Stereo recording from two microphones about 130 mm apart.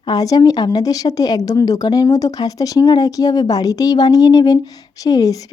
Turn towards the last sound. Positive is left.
turn(degrees=30)  # may be behind; listen again after turning